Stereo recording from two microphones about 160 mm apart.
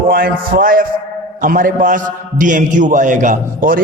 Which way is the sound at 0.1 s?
65° right (ahead or behind).